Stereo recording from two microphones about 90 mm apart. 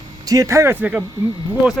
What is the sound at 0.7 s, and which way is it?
Speech, 20° right (ahead or behind).